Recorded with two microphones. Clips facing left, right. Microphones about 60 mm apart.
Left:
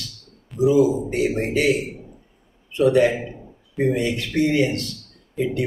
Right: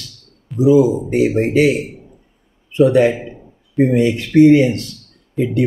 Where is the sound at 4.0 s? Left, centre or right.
Right.